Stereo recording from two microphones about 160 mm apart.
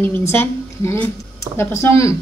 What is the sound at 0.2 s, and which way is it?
A woman's voice, 15° left (ahead or behind).